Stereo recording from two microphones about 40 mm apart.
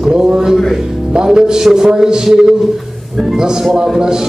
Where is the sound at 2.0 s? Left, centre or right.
Centre.